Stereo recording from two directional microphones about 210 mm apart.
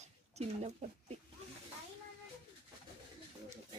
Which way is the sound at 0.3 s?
30° right (ahead or behind).